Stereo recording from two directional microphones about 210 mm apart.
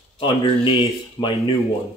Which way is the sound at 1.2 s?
15° left (ahead or behind).